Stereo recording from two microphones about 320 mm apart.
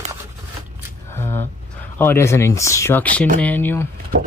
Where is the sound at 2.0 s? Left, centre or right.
Centre.